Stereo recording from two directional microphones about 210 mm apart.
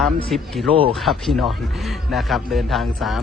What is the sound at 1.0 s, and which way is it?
Speech, centre (ahead or behind).